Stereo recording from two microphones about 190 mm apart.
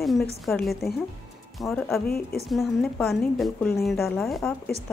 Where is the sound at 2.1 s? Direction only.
55° left (ahead or behind).